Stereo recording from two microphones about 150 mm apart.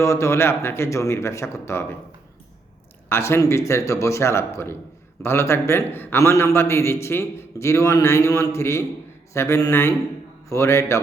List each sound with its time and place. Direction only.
0.0 s a man's voice: 20° left (ahead or behind)
3.1 s a man's voice: 15° left (ahead or behind)